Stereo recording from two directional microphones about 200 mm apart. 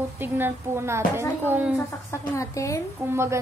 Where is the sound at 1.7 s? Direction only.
15° left (ahead or behind).